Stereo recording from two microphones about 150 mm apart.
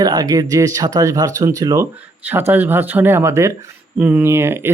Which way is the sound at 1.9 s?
10° right (ahead or behind).